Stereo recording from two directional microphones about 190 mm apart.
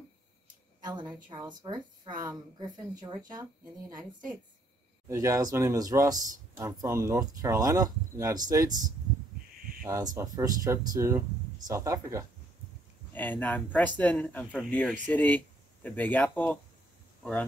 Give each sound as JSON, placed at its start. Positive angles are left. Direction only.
{"t": 0.7, "sound": "a sound", "side_deg": -20}
{"t": 1.3, "sound": "speech", "side_deg": -20}
{"t": 5.0, "sound": "speech", "side_deg": -15}
{"t": 9.8, "sound": "speech", "side_deg": -15}
{"t": 13.1, "sound": "speech", "side_deg": 10}